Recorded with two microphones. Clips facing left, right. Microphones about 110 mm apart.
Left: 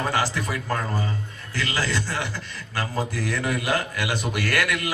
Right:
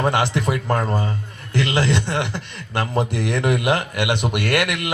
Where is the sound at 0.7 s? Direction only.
35° right (ahead or behind).